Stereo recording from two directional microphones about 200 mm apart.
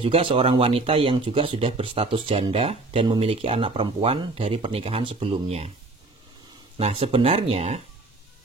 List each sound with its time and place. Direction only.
0.0 s speech: 25° right (ahead or behind)
6.8 s speech: 25° right (ahead or behind)